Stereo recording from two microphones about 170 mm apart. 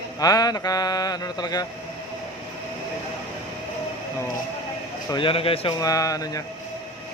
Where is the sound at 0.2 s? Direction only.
20° left (ahead or behind).